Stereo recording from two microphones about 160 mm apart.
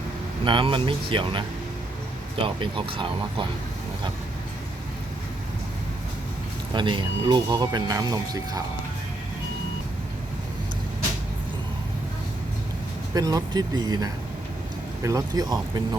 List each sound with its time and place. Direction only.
0.4 s speech: 30° right (ahead or behind)
6.7 s speech: 30° right (ahead or behind)
13.1 s speech: 25° right (ahead or behind)